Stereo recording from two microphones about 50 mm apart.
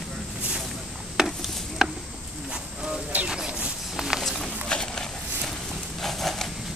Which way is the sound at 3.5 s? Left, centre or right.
Right.